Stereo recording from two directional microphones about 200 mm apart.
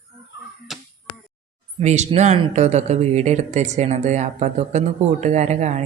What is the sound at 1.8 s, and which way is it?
Speech, 35° right (ahead or behind).